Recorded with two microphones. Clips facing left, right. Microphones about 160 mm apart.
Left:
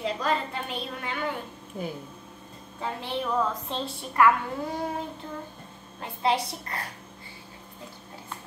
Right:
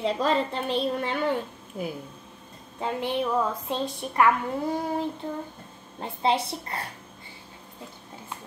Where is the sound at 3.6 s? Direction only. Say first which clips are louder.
Right 4 dB; 20° right (ahead or behind).